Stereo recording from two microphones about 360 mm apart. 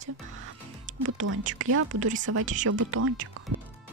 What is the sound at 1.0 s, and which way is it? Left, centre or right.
A woman's voice, right.